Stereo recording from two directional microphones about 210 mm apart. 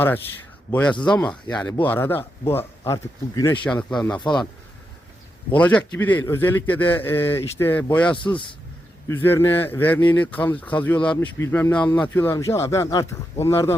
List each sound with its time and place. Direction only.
0.7 s speech: 5° left (ahead or behind)
5.5 s speech: 5° left (ahead or behind)
8.1 s a man's voice: 25° left (ahead or behind)
9.0 s speech: 10° left (ahead or behind)